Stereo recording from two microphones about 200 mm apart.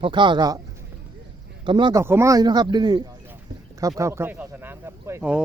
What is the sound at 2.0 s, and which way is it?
A man's voice, 15° right (ahead or behind).